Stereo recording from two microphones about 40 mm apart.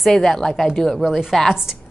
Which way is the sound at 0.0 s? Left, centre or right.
Centre.